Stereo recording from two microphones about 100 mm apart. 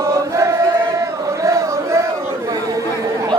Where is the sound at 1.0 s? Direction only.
30° right (ahead or behind).